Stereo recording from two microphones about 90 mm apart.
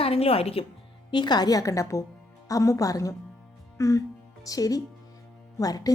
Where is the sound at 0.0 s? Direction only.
90° left.